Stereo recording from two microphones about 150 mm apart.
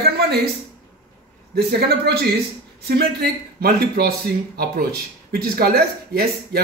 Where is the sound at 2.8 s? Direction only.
90° right.